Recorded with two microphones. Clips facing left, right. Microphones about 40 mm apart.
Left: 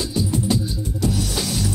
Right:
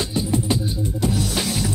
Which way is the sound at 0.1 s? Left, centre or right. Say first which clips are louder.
Left 2 dB; right.